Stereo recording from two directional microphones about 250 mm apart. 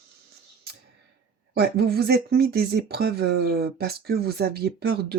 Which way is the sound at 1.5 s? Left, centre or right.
Right.